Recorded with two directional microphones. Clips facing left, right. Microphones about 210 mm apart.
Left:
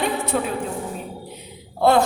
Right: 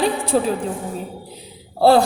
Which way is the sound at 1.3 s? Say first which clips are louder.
Even; 35° right (ahead or behind).